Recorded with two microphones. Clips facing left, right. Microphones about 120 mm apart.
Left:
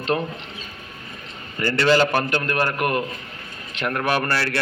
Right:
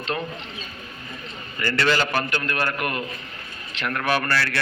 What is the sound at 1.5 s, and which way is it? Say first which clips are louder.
Speech: left 4 dB; 35° left (ahead or behind).